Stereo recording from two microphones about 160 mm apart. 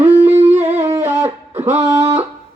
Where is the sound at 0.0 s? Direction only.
40° right (ahead or behind).